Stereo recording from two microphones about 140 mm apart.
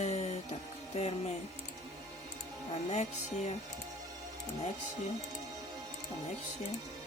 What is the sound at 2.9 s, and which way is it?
Music, 55° left (ahead or behind).